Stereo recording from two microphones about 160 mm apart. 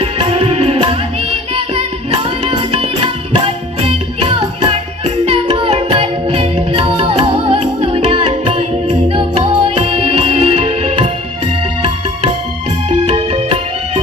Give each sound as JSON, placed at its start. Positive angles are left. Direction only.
{"t": 0.0, "sound": "music", "side_deg": -35}
{"t": 12.9, "sound": "music", "side_deg": -30}